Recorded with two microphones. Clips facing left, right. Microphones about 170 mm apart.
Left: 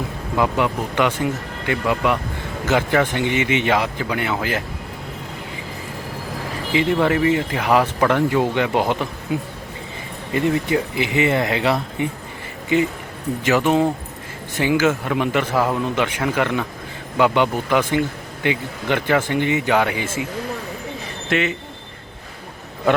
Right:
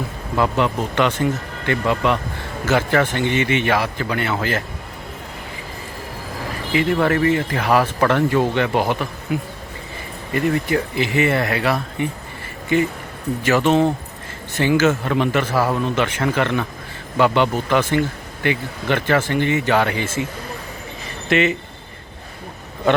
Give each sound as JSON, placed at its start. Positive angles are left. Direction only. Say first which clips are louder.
{"t": 0.3, "sound": "a man's voice", "louder": "right 1 dB", "side_deg": 10}
{"t": 6.7, "sound": "a man's voice", "louder": "even", "side_deg": 15}
{"t": 10.3, "sound": "a man's voice", "louder": "even", "side_deg": 20}
{"t": 21.2, "sound": "speech", "louder": "right 3 dB", "side_deg": 0}